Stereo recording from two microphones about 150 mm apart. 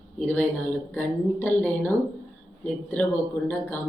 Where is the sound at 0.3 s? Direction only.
10° left (ahead or behind).